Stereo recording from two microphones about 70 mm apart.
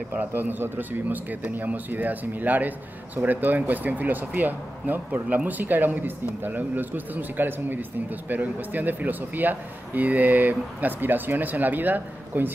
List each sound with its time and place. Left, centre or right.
0.2 s speech: right